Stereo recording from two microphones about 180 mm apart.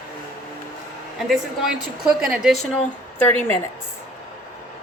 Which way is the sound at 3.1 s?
10° left (ahead or behind).